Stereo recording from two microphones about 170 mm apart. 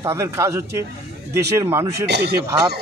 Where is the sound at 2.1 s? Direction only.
75° right (ahead or behind).